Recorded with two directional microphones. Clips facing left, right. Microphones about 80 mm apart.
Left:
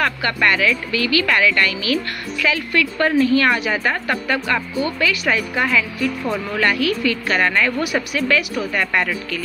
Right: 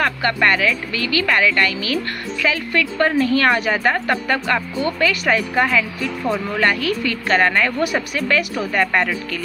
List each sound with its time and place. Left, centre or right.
0.0 s a woman's voice: right